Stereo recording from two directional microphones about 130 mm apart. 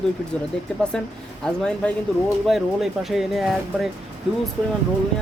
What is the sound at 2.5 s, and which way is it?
Speech, centre (ahead or behind).